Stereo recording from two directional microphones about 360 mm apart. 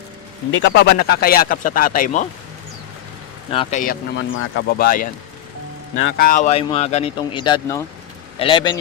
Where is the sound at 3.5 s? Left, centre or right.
Left.